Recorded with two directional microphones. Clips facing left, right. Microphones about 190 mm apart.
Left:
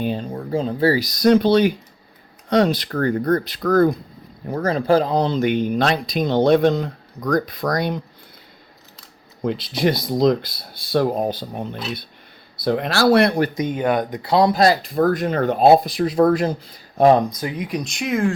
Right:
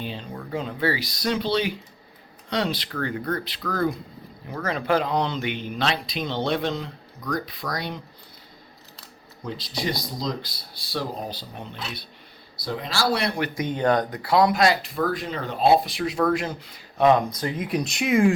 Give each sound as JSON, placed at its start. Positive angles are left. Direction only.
{"t": 0.0, "sound": "speech", "side_deg": 45}
{"t": 9.4, "sound": "speech", "side_deg": 60}
{"t": 12.6, "sound": "speech", "side_deg": 60}
{"t": 13.6, "sound": "speech", "side_deg": 15}
{"t": 14.2, "sound": "speech", "side_deg": 25}
{"t": 17.6, "sound": "speech", "side_deg": -5}